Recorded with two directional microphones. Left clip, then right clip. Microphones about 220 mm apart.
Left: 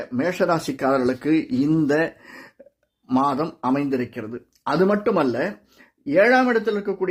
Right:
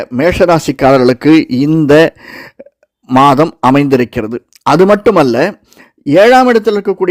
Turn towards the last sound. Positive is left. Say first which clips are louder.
# right 12 dB
turn(degrees=-50)  # may be behind; listen again after turning